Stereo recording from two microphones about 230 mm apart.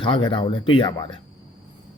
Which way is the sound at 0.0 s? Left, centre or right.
Left.